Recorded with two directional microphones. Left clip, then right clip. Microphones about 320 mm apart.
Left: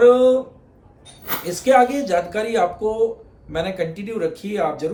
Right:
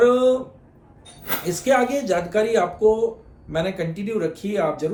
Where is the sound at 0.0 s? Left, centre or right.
Centre.